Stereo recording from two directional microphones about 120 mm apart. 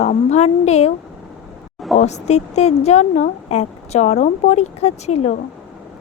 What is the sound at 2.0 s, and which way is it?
Speech, 65° left (ahead or behind).